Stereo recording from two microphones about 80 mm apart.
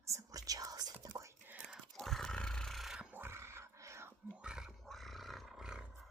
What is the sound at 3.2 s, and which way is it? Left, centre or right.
Dog, right.